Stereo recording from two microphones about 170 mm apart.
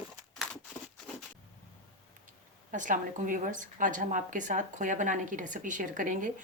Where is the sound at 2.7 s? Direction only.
50° right (ahead or behind).